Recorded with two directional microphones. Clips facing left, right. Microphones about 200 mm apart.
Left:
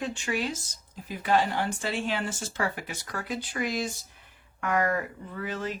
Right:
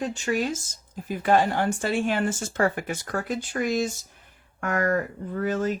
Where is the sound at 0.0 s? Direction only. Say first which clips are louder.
Right 4 dB; 40° right (ahead or behind).